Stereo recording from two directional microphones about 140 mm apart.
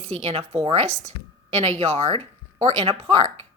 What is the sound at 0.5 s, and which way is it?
Speech, 35° right (ahead or behind).